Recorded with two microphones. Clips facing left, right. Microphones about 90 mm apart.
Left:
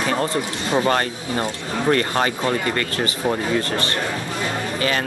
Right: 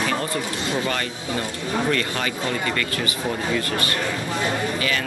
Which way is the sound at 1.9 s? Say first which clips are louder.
Left 5 dB; 40° left (ahead or behind).